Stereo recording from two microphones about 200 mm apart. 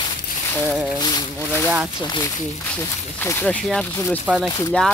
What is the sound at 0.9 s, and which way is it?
Speech, 20° left (ahead or behind).